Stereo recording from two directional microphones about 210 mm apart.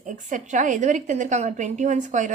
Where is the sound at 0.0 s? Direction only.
35° right (ahead or behind).